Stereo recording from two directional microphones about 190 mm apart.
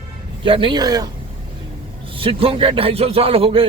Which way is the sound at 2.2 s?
30° right (ahead or behind).